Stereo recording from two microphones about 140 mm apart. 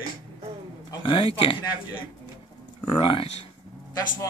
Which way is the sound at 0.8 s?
35° left (ahead or behind).